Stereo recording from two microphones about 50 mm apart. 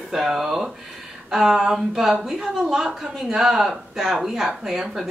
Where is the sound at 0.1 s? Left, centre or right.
Centre.